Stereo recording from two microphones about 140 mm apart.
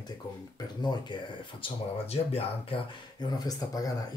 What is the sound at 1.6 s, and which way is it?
Speech, 45° left (ahead or behind).